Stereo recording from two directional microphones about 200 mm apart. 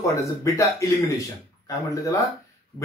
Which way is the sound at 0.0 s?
15° left (ahead or behind).